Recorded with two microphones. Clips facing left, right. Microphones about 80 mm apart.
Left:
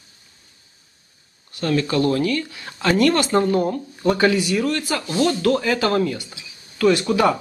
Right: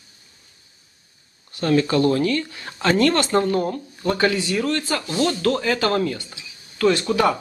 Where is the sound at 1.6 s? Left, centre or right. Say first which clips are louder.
Right 2 dB; centre.